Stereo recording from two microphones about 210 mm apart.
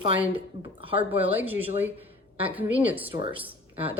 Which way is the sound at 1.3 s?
10° right (ahead or behind).